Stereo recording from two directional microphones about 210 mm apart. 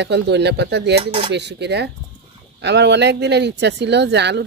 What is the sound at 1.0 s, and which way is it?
Speech, 25° right (ahead or behind).